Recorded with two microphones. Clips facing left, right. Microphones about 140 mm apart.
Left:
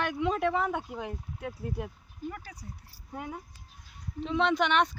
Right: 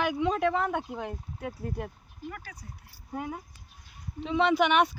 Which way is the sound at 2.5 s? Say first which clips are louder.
Even; 30° left (ahead or behind).